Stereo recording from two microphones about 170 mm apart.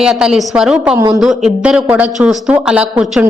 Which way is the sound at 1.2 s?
5° right (ahead or behind).